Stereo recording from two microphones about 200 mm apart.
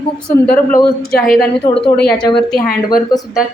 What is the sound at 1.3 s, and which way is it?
Speech, 50° left (ahead or behind).